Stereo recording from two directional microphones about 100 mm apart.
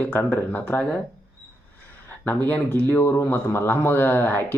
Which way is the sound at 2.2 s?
20° left (ahead or behind).